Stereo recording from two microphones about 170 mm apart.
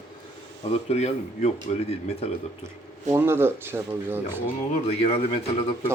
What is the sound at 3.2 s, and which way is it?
Speech, 15° right (ahead or behind).